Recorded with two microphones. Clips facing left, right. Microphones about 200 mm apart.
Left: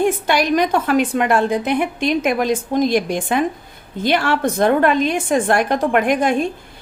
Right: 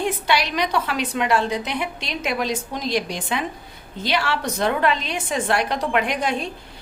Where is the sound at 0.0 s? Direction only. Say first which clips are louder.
Left 5 dB; 50° left (ahead or behind).